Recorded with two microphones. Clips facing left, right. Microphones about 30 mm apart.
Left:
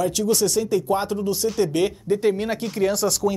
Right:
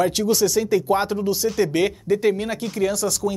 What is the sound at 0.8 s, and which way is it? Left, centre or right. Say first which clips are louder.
Speech: right 2 dB; right.